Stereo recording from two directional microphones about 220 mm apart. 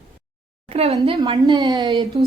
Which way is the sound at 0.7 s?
30° right (ahead or behind).